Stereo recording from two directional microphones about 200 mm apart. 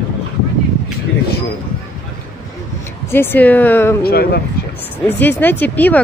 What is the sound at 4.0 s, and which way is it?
Speech, 50° left (ahead or behind).